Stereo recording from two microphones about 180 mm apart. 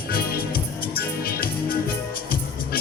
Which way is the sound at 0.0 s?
55° left (ahead or behind).